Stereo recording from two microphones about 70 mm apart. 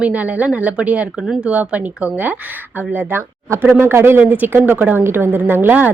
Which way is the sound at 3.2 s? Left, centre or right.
Right.